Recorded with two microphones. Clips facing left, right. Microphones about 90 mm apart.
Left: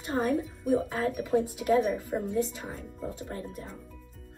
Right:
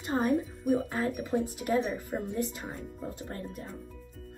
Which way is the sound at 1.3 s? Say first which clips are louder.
Left 7 dB; 25° right (ahead or behind).